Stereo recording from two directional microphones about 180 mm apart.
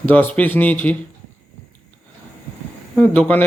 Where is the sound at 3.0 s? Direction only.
10° left (ahead or behind).